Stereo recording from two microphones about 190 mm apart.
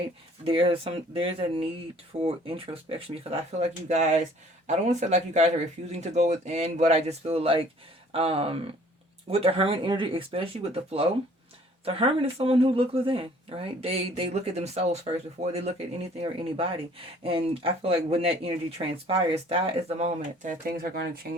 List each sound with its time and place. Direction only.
0.4 s speech: 30° right (ahead or behind); by 21.1 s 50° right (ahead or behind)